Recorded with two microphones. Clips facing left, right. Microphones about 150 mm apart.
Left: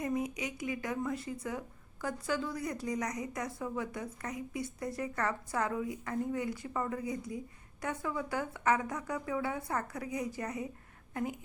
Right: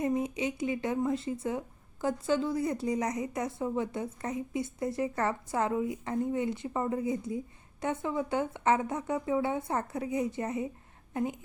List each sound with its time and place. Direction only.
0.0 s a woman's voice: 25° right (ahead or behind)